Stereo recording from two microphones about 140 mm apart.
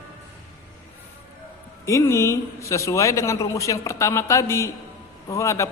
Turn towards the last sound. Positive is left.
turn(degrees=20)  # may be behind; listen again after turning